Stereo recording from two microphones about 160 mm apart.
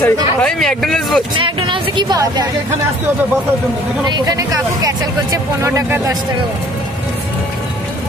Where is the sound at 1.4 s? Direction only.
30° right (ahead or behind).